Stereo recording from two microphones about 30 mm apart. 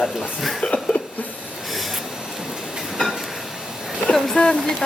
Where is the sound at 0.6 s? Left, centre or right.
Left.